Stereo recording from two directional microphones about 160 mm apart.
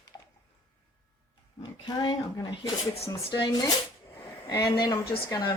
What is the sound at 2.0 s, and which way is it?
Speech, 25° left (ahead or behind).